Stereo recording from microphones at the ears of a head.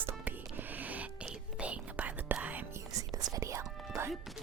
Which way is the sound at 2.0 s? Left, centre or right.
Right.